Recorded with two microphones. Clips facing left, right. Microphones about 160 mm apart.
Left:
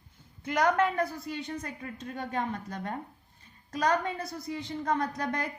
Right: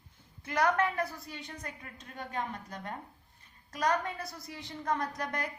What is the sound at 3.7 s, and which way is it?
A woman's voice, 30° left (ahead or behind).